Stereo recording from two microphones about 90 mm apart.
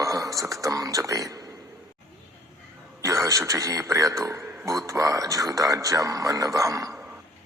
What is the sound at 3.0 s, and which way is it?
A man's voice, 35° right (ahead or behind).